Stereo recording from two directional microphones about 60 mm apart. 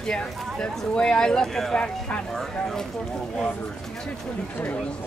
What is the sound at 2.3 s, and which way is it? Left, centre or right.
Speech, centre.